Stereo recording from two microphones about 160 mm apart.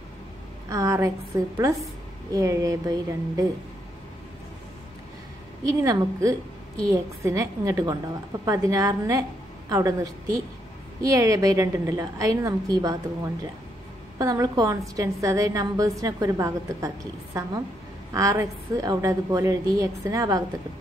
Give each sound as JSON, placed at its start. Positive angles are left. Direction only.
{"t": 0.7, "sound": "a woman's voice", "side_deg": -20}
{"t": 5.7, "sound": "a woman's voice", "side_deg": -20}
{"t": 14.1, "sound": "a woman's voice", "side_deg": -20}